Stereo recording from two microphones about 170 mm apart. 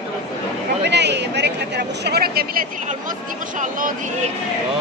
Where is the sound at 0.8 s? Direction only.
90° right; by 2.4 s 65° right (ahead or behind).